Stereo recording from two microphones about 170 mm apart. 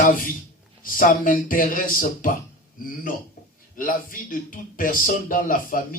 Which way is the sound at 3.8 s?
55° left (ahead or behind).